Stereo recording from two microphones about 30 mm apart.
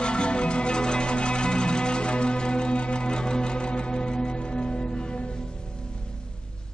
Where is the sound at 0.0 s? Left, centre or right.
Left.